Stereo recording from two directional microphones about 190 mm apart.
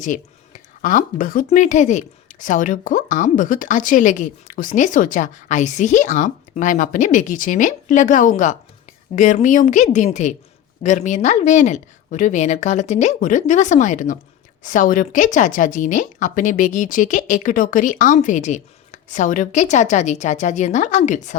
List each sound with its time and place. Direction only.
0.0 s speech: 40° left (ahead or behind)